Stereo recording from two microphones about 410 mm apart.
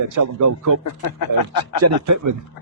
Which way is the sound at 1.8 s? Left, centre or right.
Right.